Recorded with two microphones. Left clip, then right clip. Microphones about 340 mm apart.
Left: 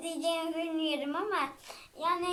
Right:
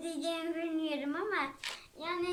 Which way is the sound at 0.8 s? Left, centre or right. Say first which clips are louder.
Left 3 dB; centre.